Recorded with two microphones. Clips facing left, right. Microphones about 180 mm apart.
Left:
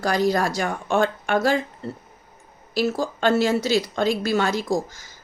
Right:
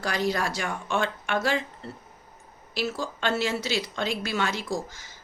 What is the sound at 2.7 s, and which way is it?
Speech, 40° left (ahead or behind).